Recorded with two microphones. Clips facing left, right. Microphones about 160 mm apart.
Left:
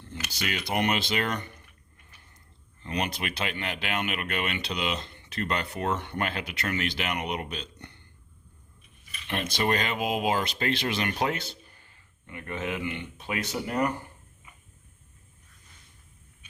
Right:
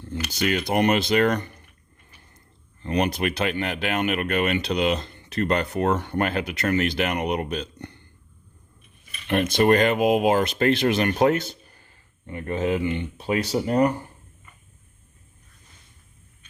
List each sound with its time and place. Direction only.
0.3 s speech: 45° right (ahead or behind)
2.8 s speech: 45° right (ahead or behind)
9.2 s speech: 50° right (ahead or behind); by 13.9 s 30° right (ahead or behind)
14.5 s a sound: 10° left (ahead or behind)